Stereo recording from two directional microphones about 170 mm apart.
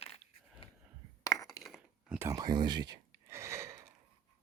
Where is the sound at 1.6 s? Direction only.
5° right (ahead or behind).